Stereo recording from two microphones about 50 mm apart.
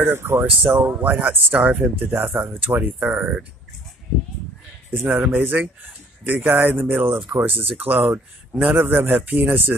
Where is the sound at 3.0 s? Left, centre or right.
Centre.